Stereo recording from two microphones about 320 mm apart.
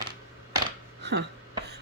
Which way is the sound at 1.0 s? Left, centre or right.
Right.